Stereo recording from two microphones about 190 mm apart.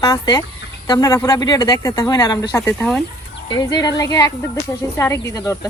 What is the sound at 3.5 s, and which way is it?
A woman's voice, 20° left (ahead or behind).